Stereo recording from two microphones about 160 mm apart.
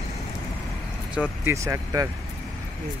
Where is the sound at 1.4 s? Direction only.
20° right (ahead or behind).